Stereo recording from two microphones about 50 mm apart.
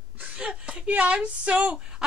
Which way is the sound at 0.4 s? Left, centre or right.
Centre.